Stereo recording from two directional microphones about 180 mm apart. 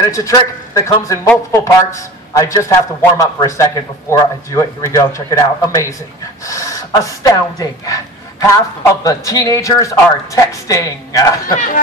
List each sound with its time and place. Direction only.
0.1 s a man's voice: 15° left (ahead or behind)
11.4 s speech: 50° left (ahead or behind)